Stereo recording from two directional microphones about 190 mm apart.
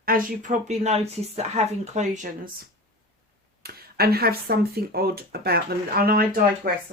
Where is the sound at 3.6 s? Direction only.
55° right (ahead or behind).